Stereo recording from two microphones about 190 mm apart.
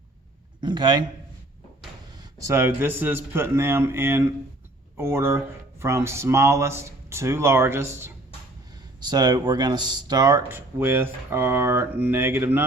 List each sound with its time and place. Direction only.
0.6 s speech: 25° right (ahead or behind)
2.1 s speech: 15° right (ahead or behind)